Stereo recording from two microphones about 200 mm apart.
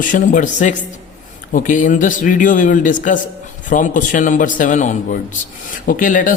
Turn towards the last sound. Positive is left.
turn(degrees=40)  # may be behind; listen again after turning